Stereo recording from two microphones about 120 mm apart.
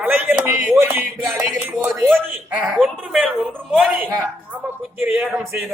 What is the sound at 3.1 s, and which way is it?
Speech, 5° right (ahead or behind).